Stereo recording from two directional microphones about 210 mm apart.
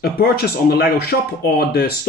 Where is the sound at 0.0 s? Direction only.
50° left (ahead or behind).